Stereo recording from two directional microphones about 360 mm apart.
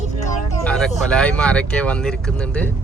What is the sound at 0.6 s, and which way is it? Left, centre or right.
Speech, centre.